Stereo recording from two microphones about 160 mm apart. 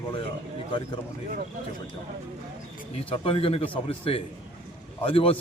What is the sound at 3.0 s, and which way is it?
A man's voice, 35° left (ahead or behind).